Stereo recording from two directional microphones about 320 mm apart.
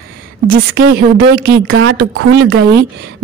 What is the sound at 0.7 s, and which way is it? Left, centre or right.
Speech, right.